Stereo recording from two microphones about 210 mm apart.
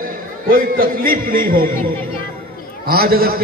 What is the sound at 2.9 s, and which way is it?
Speech, 45° right (ahead or behind).